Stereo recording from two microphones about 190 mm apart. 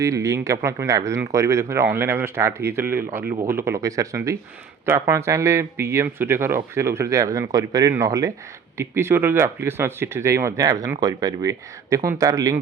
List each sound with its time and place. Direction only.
0.0 s speech: 15° right (ahead or behind)